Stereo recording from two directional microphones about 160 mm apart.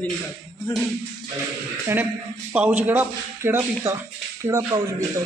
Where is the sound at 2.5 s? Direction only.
10° right (ahead or behind).